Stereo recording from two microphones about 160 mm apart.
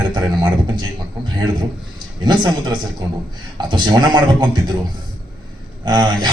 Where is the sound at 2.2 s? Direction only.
25° right (ahead or behind).